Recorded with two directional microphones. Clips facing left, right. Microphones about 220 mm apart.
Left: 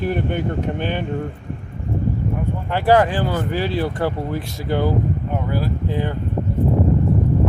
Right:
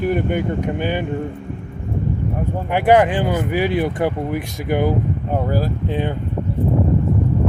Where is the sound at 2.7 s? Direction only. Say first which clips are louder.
Right 2 dB; 20° right (ahead or behind).